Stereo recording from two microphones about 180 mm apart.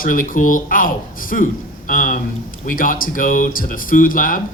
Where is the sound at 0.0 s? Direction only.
50° left (ahead or behind).